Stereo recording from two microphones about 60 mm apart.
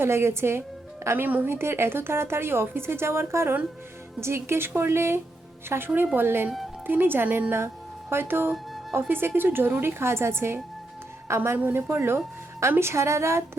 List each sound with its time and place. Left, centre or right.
0.0 s speech: right
1.1 s a woman's voice: right
8.5 s music: centre
9.0 s a woman's voice: right